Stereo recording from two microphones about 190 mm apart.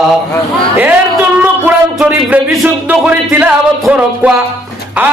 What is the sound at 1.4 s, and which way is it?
Music, 5° right (ahead or behind).